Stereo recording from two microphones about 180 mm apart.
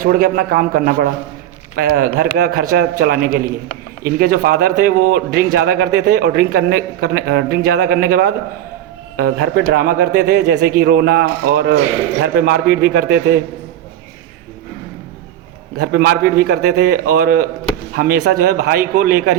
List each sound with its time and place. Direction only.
0.0 s a man's voice: 55° right (ahead or behind)
15.8 s a man's voice: 60° right (ahead or behind)